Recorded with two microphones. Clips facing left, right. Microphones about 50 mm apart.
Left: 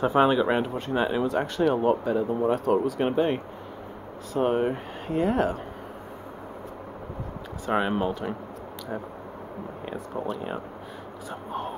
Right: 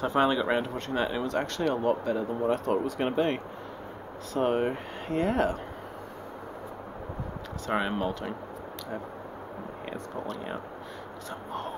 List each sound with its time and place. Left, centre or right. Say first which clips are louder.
0.0 s speech: left 4 dB; centre
7.6 s speech: left 4 dB; centre
10.1 s speech: left 6 dB; centre